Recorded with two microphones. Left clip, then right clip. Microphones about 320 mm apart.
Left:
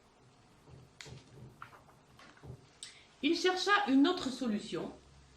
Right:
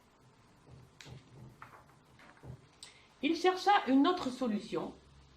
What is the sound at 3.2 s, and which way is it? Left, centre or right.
A woman's voice, centre.